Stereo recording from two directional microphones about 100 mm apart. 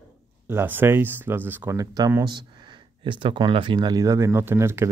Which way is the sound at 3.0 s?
55° right (ahead or behind).